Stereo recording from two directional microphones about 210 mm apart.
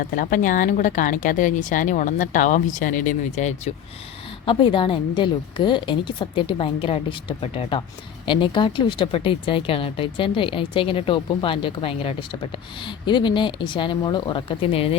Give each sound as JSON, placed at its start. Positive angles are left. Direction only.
{"t": 0.0, "sound": "speech", "side_deg": 40}
{"t": 4.4, "sound": "speech", "side_deg": 25}